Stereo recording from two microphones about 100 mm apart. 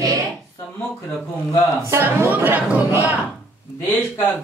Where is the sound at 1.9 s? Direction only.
25° right (ahead or behind).